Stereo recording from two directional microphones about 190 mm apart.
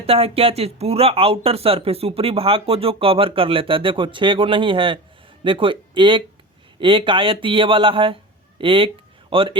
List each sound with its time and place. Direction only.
0.0 s speech: 30° right (ahead or behind)